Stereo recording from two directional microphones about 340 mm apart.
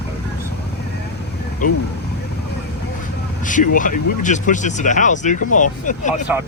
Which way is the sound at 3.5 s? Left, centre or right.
Left.